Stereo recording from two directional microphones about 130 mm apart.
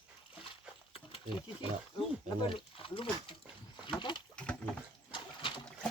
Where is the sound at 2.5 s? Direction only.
45° left (ahead or behind).